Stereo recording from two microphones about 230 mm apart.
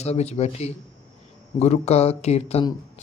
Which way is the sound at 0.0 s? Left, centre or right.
Left.